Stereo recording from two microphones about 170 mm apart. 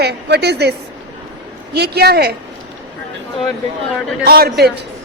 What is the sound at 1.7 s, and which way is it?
Speech, 75° right (ahead or behind).